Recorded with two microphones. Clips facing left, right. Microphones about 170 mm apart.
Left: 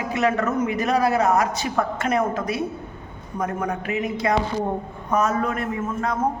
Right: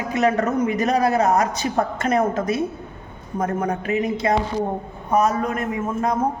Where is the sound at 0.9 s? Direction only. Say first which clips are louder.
Even; 20° right (ahead or behind).